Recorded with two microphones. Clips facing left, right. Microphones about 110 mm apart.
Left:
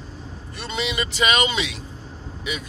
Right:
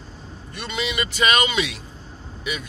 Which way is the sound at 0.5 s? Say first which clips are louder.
Even; 30° left (ahead or behind).